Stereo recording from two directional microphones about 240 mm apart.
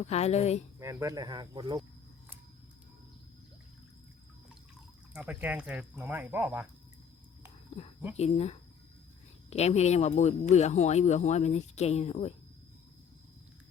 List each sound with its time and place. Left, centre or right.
0.0 s speech: left
0.8 s speech: centre
5.1 s speech: centre
8.1 s speech: left